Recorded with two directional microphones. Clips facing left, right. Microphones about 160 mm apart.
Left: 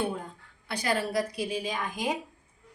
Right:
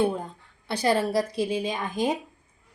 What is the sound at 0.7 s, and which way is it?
A woman's voice, 25° right (ahead or behind).